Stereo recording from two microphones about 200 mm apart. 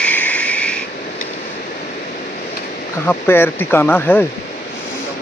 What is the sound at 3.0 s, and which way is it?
Speech, 10° left (ahead or behind).